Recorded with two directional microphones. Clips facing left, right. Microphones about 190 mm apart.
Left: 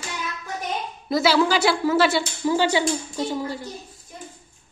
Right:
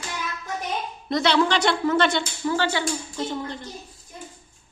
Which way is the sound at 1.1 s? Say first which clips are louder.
Left 2 dB; 5° left (ahead or behind).